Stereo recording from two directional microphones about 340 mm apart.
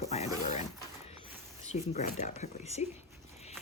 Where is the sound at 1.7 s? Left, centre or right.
Centre.